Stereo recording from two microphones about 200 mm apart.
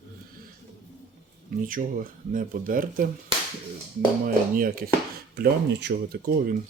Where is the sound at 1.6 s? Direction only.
45° right (ahead or behind).